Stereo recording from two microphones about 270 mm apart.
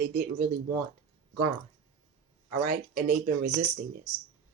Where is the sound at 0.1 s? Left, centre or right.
Right.